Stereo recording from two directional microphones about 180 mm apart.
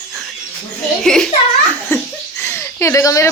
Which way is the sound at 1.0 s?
5° left (ahead or behind).